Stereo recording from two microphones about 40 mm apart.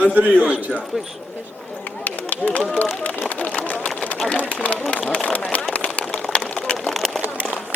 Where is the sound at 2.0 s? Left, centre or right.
Left.